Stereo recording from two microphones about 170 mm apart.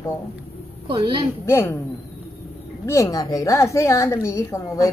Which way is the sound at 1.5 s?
15° left (ahead or behind).